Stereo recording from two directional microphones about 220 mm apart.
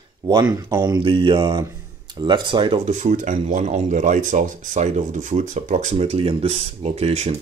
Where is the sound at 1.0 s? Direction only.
20° right (ahead or behind).